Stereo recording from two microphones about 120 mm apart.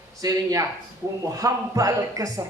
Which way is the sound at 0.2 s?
30° right (ahead or behind).